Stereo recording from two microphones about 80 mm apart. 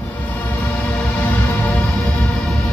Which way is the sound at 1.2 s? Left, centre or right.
Centre.